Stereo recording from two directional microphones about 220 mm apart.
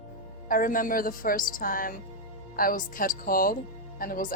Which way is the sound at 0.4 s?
40° left (ahead or behind).